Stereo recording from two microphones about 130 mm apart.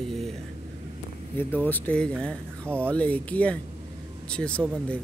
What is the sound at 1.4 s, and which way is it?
Speech, 15° left (ahead or behind).